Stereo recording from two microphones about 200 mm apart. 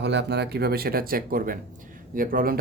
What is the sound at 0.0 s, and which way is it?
Speech, 55° right (ahead or behind).